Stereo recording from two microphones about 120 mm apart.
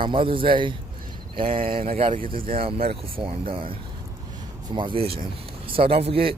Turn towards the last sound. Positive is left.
turn(degrees=-55)  # may be behind; listen again after turning